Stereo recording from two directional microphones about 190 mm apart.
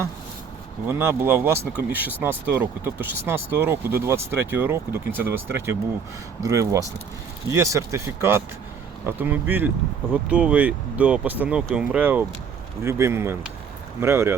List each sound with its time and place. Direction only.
0.9 s speech: 15° right (ahead or behind)